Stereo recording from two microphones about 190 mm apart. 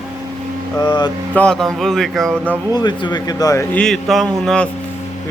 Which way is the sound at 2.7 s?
25° left (ahead or behind).